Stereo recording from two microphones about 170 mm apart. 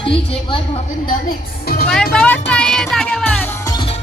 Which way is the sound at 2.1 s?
5° left (ahead or behind).